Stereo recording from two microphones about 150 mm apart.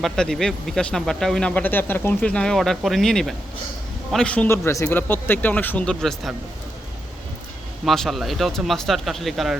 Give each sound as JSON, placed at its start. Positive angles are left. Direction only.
{"t": 0.0, "sound": "a man's voice", "side_deg": 0}
{"t": 7.9, "sound": "speech", "side_deg": 0}